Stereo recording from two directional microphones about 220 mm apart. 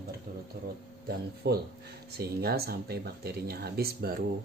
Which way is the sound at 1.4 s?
50° right (ahead or behind).